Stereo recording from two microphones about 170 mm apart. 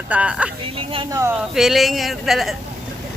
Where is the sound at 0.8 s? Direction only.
30° right (ahead or behind).